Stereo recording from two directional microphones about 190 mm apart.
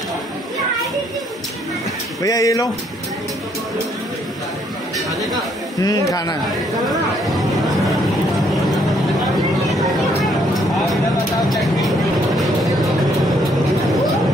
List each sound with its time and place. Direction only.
2.2 s speech: 20° left (ahead or behind)
5.8 s speech: 20° left (ahead or behind)